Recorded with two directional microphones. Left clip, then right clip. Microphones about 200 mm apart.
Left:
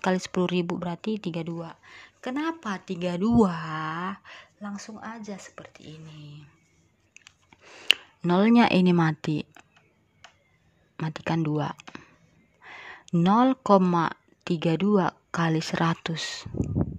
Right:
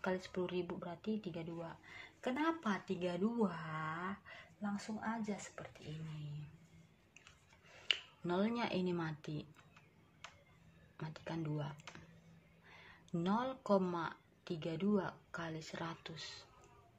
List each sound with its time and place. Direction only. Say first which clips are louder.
0.0 s speech: left 14 dB; 60° left (ahead or behind)
7.2 s a sound: left 11 dB; 55° left (ahead or behind)
11.0 s speech: left 16 dB; 60° left (ahead or behind)